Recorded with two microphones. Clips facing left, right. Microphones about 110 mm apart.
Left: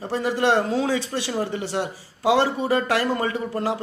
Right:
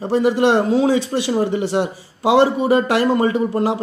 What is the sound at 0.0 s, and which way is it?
A man's voice, 20° right (ahead or behind).